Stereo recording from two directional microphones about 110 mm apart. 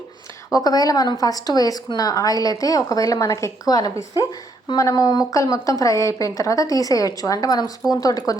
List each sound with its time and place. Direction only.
0.5 s a woman's voice: 35° left (ahead or behind)